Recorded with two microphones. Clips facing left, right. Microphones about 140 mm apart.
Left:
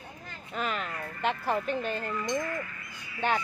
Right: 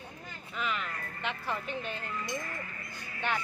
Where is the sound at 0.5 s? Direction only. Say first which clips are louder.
Left 3 dB; 40° left (ahead or behind).